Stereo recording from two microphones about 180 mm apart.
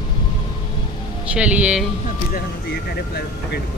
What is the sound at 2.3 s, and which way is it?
Speech, 60° left (ahead or behind).